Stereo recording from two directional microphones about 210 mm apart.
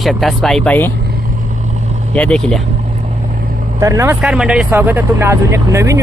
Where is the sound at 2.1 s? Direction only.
5° left (ahead or behind).